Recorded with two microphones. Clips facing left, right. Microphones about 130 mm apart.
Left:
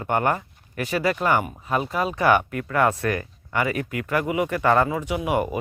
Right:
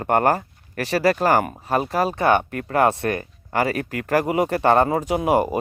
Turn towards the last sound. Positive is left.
turn(degrees=-35)  # may be behind; listen again after turning